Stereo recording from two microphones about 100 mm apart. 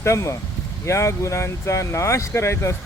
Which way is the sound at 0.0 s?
30° left (ahead or behind).